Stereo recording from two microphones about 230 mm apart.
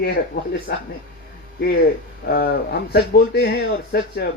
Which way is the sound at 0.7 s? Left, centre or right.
Left.